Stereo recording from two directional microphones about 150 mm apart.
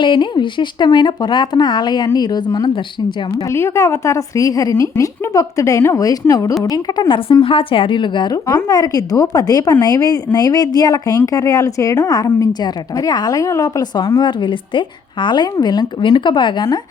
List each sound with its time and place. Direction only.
0.0 s speech: 30° left (ahead or behind)
3.5 s speech: 20° left (ahead or behind)